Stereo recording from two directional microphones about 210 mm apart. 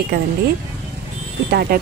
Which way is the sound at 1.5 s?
45° right (ahead or behind).